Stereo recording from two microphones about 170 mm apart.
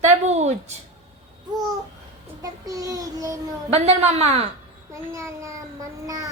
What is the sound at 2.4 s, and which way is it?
Child singing, 20° right (ahead or behind).